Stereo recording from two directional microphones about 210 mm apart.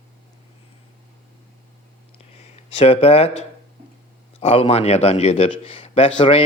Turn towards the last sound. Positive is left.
turn(degrees=25)  # may be behind; listen again after turning